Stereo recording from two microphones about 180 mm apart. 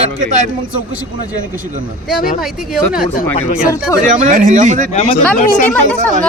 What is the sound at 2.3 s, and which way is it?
Speech, centre (ahead or behind).